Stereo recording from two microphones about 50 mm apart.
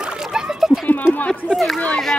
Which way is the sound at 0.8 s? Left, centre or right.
Left.